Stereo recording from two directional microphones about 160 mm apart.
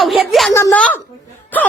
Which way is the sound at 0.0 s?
Centre (ahead or behind).